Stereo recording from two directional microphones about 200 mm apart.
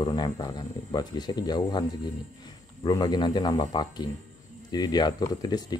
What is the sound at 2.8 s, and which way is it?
Speech, 20° left (ahead or behind).